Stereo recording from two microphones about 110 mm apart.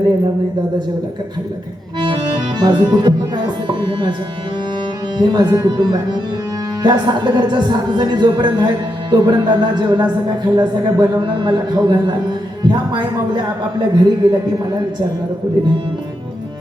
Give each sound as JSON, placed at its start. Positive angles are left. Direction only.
{"t": 2.0, "sound": "speech", "side_deg": -45}
{"t": 5.1, "sound": "speech", "side_deg": -45}